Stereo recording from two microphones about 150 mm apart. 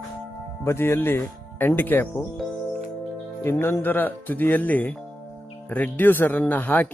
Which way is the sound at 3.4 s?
15° left (ahead or behind).